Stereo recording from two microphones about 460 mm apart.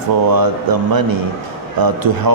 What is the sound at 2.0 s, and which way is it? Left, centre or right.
Speech, right.